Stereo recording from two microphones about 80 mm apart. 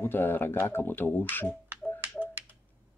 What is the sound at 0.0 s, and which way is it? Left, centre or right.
Speech, left.